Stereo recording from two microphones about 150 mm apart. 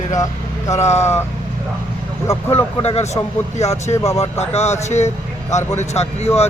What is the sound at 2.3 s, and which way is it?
Speech, 15° left (ahead or behind).